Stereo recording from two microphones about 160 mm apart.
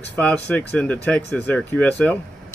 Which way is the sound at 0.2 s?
10° left (ahead or behind).